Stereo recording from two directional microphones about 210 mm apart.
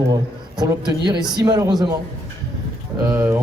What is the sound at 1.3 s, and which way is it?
Speech, 20° right (ahead or behind).